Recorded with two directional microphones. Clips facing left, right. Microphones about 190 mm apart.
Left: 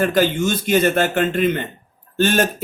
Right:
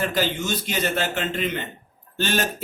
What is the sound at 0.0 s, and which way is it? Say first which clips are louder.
A man's voice: left 7 dB; 50° left (ahead or behind).